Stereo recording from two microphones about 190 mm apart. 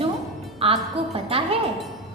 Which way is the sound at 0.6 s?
30° right (ahead or behind).